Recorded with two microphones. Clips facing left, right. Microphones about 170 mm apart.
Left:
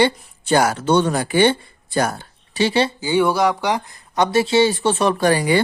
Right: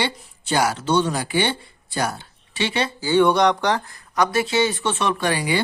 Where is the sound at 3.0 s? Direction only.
15° left (ahead or behind).